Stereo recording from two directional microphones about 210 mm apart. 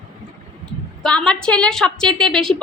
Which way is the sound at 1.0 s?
5° left (ahead or behind).